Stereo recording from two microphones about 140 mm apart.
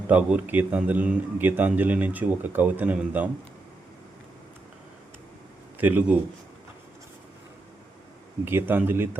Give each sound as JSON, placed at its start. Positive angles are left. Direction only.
{"t": 0.1, "sound": "a man's voice", "side_deg": -10}
{"t": 5.7, "sound": "a man's voice", "side_deg": -10}
{"t": 8.4, "sound": "a man's voice", "side_deg": -15}